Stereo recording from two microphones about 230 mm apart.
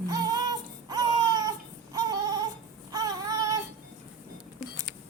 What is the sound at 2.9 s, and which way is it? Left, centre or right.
Child singing, centre.